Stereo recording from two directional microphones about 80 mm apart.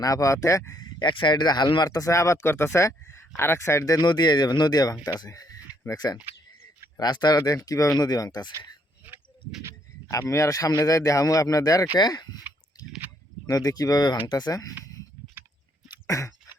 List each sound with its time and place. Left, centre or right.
0.0 s speech: left
0.9 s speech: left
4.1 s speech: left
10.1 s speech: left
11.9 s speech: left
13.5 s speech: left
16.0 s a sound: left